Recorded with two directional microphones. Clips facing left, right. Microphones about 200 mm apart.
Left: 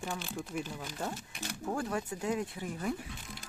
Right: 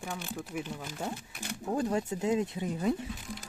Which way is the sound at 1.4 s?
20° right (ahead or behind).